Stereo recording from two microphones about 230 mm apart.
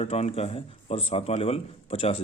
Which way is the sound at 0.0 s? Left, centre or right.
Left.